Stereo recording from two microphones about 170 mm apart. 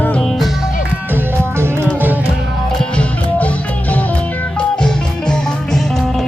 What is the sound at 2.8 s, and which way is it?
Music, 5° left (ahead or behind).